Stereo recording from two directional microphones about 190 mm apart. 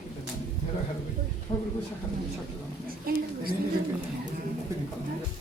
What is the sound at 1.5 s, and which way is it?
Speech, 25° left (ahead or behind).